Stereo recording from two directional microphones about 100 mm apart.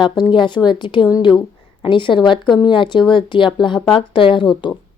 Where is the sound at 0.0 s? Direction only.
50° left (ahead or behind).